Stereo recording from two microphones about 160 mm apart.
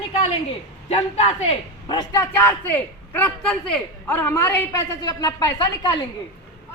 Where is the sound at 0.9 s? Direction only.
40° left (ahead or behind).